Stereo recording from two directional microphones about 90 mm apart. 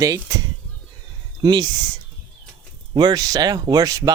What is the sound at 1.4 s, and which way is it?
Speech, 50° right (ahead or behind).